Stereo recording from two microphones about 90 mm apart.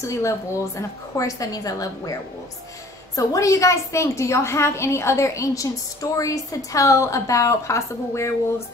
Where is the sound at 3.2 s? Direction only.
40° left (ahead or behind).